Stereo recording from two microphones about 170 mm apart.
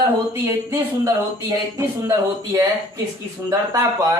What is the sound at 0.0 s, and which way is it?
Speech, 15° right (ahead or behind).